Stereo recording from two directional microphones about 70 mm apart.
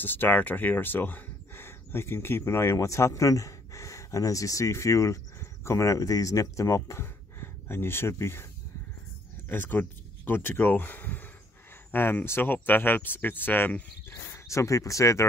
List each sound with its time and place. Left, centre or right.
0.0 s speech: left
9.5 s speech: left
14.5 s speech: left